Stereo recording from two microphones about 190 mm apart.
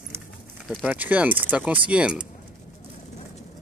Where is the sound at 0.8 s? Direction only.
10° right (ahead or behind).